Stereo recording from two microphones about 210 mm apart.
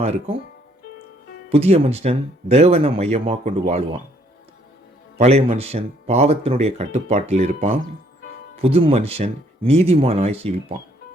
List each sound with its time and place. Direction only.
0.0 s speech: 30° right (ahead or behind)
1.5 s speech: 30° right (ahead or behind)
5.1 s speech: 30° right (ahead or behind)